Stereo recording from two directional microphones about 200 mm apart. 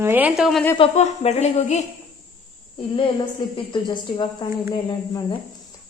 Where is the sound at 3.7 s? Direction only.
25° left (ahead or behind).